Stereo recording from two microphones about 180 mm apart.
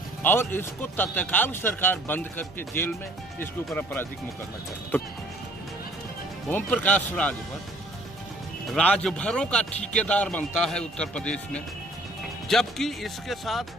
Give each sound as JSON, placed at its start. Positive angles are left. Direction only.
{"t": 0.2, "sound": "a man's voice", "side_deg": 10}
{"t": 6.5, "sound": "a man's voice", "side_deg": 10}
{"t": 8.7, "sound": "a man's voice", "side_deg": 5}